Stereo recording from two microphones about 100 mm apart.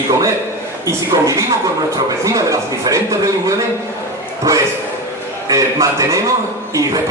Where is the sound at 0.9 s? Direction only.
35° right (ahead or behind).